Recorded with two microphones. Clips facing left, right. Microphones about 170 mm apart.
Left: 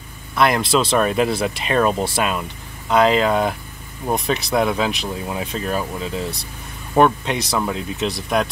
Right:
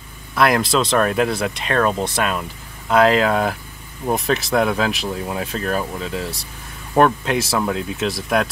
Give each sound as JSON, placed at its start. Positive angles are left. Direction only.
{"t": 0.4, "sound": "speech", "side_deg": 0}